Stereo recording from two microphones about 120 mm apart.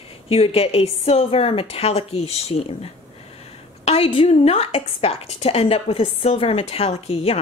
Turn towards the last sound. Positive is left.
turn(degrees=60)  # may be behind; listen again after turning